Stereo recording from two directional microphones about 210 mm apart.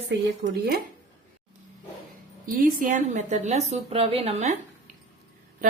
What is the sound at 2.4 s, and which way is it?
A woman's voice, 40° right (ahead or behind).